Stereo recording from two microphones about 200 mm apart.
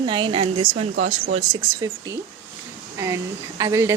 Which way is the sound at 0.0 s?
25° right (ahead or behind).